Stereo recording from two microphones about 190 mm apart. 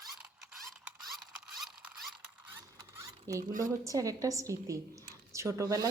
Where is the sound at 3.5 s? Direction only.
45° right (ahead or behind).